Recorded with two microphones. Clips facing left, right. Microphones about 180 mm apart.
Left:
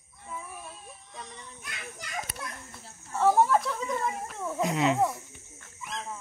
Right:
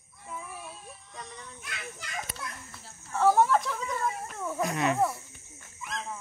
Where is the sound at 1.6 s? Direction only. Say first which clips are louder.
Even; 15° left (ahead or behind).